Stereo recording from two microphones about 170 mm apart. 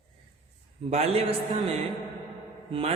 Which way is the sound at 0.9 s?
35° right (ahead or behind).